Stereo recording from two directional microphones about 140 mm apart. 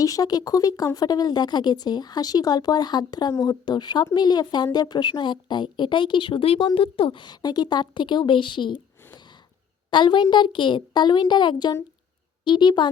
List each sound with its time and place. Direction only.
0.0 s speech: 25° left (ahead or behind)
9.9 s speech: 35° left (ahead or behind)